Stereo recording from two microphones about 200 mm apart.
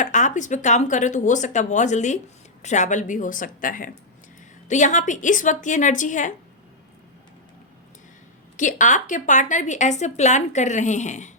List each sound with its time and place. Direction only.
0.0 s a woman's voice: 40° left (ahead or behind)
8.5 s a woman's voice: 40° left (ahead or behind)